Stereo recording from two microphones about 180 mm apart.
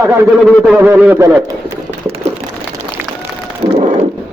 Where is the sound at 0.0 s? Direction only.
10° right (ahead or behind).